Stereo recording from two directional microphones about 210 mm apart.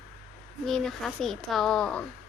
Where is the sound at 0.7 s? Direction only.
Centre (ahead or behind).